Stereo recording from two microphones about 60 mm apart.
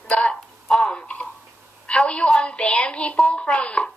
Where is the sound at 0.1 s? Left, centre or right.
Centre.